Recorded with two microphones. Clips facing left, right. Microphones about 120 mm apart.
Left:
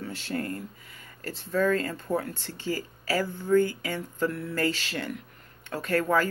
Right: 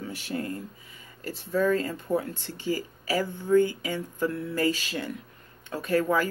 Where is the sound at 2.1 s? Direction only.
20° right (ahead or behind).